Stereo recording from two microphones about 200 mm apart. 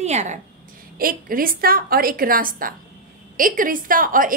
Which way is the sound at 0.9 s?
45° right (ahead or behind).